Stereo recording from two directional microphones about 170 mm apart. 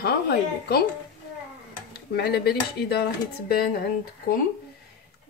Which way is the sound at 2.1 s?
70° left (ahead or behind).